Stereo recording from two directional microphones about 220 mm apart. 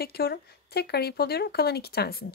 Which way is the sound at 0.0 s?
45° left (ahead or behind).